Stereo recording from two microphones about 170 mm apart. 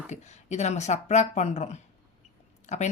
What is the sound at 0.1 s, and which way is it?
Speech, 40° left (ahead or behind).